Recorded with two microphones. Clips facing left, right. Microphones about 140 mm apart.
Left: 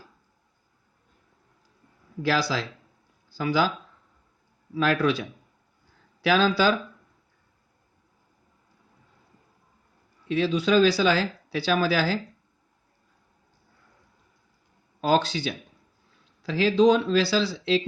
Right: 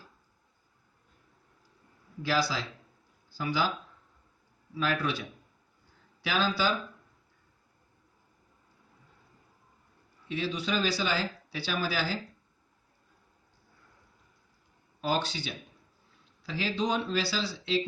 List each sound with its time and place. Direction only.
2.2 s speech: 90° left
4.8 s speech: 90° left
6.2 s speech: 90° left
10.2 s speech: 90° left
15.0 s speech: 90° left